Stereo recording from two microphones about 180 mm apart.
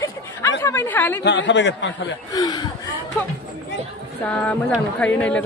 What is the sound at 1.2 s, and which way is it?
Speech, 80° left.